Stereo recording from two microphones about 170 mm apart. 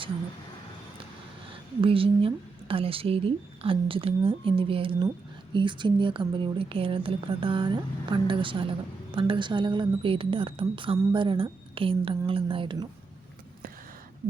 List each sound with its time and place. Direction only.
1.8 s a woman's voice: 30° right (ahead or behind)